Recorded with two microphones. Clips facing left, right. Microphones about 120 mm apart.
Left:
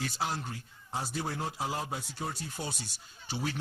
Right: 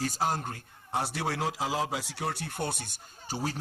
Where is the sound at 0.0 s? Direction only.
45° right (ahead or behind).